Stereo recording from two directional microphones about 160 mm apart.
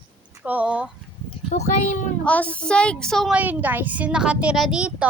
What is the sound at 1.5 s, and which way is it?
Speech, 45° left (ahead or behind).